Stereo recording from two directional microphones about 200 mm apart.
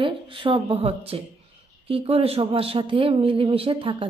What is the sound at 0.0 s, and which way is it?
Speech, 25° right (ahead or behind).